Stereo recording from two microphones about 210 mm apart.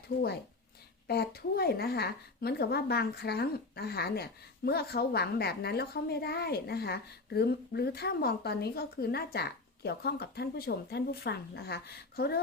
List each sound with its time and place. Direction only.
1.0 s a woman's voice: 50° left (ahead or behind)